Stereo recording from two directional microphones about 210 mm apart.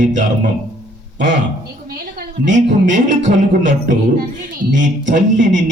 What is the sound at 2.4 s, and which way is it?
A man's voice, 40° right (ahead or behind).